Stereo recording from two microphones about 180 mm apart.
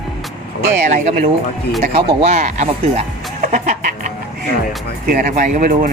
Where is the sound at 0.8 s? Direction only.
45° right (ahead or behind).